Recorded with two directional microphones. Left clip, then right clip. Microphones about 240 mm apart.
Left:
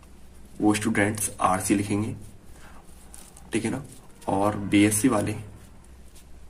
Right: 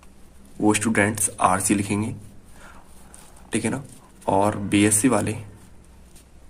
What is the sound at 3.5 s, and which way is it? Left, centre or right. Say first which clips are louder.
Speech: right 2 dB; right.